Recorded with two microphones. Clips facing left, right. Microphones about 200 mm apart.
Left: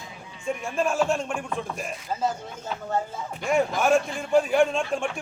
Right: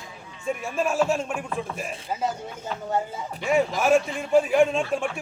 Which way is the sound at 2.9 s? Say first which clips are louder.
Right 1 dB; 10° right (ahead or behind).